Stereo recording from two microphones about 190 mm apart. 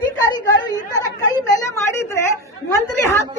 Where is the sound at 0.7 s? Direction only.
20° left (ahead or behind).